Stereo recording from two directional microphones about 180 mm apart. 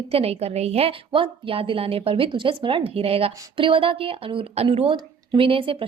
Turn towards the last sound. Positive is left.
turn(degrees=-30)  # may be behind; listen again after turning